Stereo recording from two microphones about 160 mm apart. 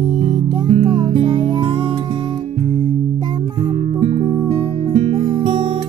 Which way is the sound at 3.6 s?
40° right (ahead or behind).